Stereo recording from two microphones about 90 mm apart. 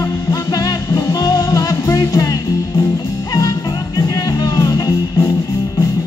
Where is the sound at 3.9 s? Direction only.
45° left (ahead or behind).